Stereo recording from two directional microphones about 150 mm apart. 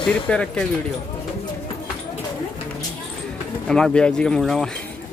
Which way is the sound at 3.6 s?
5° left (ahead or behind).